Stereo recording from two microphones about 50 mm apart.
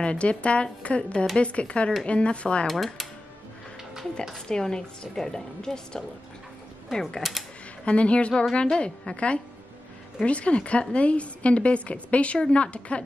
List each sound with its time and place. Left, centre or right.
0.0 s a woman's voice: left
2.6 s speech: centre
4.5 s a woman's voice: centre
7.2 s speech: centre
7.8 s a woman's voice: left